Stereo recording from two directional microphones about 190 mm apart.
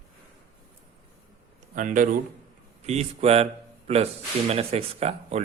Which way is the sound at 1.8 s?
45° right (ahead or behind).